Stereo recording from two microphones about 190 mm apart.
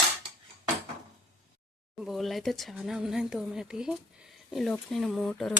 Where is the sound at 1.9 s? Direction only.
Centre (ahead or behind).